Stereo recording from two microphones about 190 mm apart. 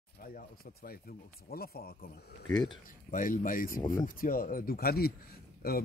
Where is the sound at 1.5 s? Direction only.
50° left (ahead or behind).